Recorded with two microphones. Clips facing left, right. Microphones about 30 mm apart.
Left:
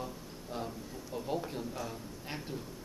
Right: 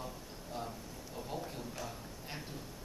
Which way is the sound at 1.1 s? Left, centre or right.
Centre.